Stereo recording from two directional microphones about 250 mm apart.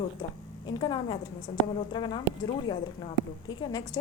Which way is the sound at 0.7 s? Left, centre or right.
Centre.